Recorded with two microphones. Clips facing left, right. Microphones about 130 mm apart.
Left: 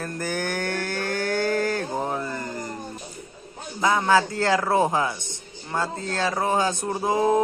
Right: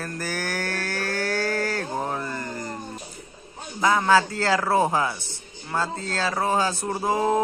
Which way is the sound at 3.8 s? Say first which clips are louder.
Right 1 dB; 15° left (ahead or behind).